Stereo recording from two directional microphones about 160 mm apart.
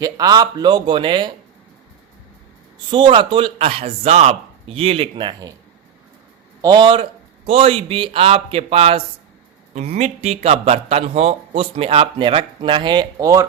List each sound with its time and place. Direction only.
0.0 s a man's voice: 25° right (ahead or behind)
2.9 s a man's voice: 30° right (ahead or behind)
6.6 s a man's voice: 25° right (ahead or behind)